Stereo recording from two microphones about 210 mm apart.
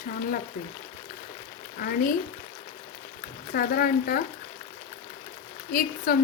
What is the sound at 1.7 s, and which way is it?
Speech, 45° left (ahead or behind).